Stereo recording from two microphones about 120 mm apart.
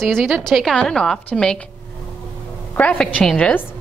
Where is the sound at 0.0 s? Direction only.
Centre (ahead or behind).